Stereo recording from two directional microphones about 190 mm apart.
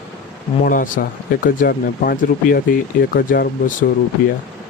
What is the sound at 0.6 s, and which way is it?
Speech, 45° left (ahead or behind).